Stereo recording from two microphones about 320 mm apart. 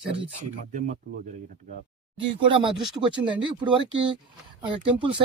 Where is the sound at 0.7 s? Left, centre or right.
Right.